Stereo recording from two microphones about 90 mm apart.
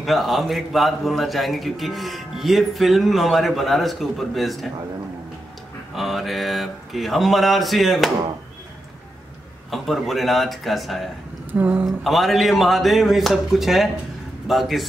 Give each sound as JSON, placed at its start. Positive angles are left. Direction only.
{"t": 0.0, "sound": "a man's voice", "side_deg": 0}
{"t": 5.9, "sound": "a man's voice", "side_deg": 0}
{"t": 9.7, "sound": "a man's voice", "side_deg": 0}
{"t": 11.5, "sound": "speech", "side_deg": -15}
{"t": 11.8, "sound": "a man's voice", "side_deg": 0}